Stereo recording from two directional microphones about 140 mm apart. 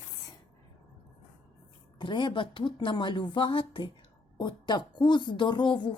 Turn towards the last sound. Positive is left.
turn(degrees=35)  # may be behind; listen again after turning